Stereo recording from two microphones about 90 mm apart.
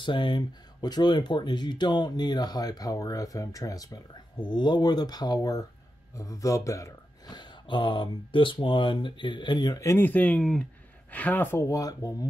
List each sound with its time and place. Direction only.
0.0 s speech: 60° left (ahead or behind); by 6.9 s 35° left (ahead or behind)
7.2 s speech: 55° left (ahead or behind)
9.8 s speech: 35° left (ahead or behind)
10.0 s speech: 15° left (ahead or behind)
10.4 s speech: 5° left (ahead or behind)
11.1 s speech: 20° left (ahead or behind)
11.6 s speech: 40° left (ahead or behind)